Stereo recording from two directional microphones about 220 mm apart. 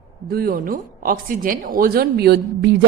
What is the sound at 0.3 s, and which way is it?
Speech, 40° right (ahead or behind).